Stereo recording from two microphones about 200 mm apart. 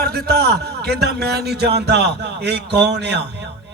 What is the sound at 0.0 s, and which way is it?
A man's voice, 50° right (ahead or behind).